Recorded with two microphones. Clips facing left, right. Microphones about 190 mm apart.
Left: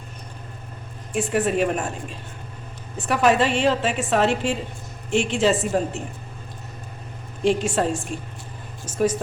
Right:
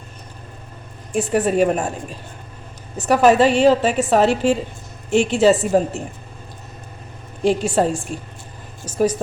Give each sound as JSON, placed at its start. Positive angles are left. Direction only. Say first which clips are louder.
{"t": 1.1, "sound": "a woman's voice", "louder": "right 4 dB", "side_deg": -40}
{"t": 7.4, "sound": "a woman's voice", "louder": "right 3 dB", "side_deg": -35}
{"t": 8.9, "sound": "a woman's voice", "louder": "right 3 dB", "side_deg": -35}